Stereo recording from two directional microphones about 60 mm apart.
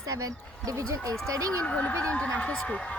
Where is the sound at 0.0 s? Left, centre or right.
Right.